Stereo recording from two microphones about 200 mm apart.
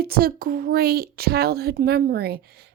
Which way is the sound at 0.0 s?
50° right (ahead or behind).